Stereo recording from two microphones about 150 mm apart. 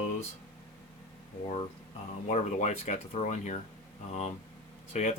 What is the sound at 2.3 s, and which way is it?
Speech, 50° left (ahead or behind).